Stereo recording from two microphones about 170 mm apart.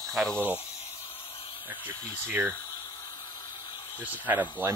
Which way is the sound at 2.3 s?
15° right (ahead or behind).